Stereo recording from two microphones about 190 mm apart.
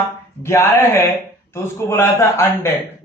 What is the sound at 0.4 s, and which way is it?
Speech, 15° left (ahead or behind).